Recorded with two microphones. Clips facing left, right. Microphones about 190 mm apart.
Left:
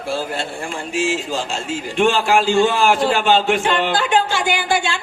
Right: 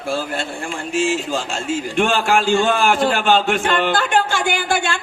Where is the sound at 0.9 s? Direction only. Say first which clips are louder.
Right 2 dB; 50° right (ahead or behind).